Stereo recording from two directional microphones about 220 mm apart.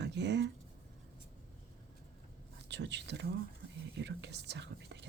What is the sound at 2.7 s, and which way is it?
Speech, 50° right (ahead or behind).